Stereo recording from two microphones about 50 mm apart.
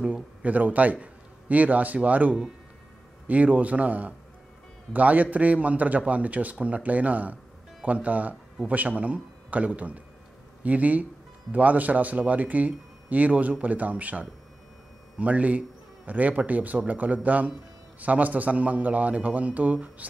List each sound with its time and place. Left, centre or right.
0.0 s speech: right
0.9 s a sound: right
2.0 s speech: right